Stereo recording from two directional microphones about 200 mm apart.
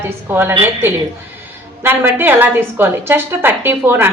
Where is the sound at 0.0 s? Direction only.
10° right (ahead or behind).